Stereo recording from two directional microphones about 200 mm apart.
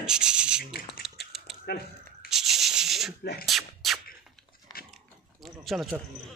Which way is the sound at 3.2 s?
50° left (ahead or behind).